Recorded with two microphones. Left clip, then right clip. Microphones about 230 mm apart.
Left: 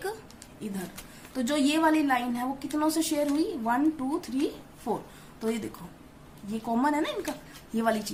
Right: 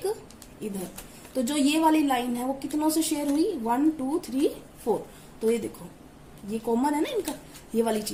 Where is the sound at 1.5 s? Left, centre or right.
Left.